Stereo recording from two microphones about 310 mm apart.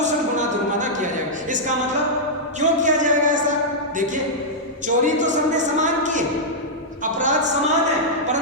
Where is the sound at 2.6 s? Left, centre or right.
Right.